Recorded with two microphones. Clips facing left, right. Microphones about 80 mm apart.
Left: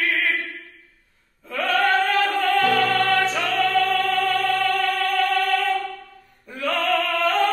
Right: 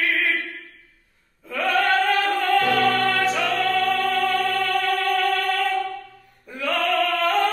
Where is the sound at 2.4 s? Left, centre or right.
Centre.